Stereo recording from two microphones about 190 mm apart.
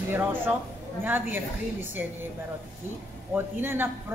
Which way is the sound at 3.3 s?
10° right (ahead or behind).